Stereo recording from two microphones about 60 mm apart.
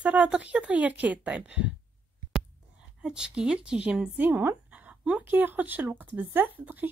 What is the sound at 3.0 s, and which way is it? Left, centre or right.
A woman's voice, centre.